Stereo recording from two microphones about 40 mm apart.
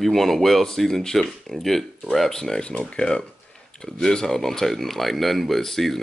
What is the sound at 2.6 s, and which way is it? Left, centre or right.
Speech, left.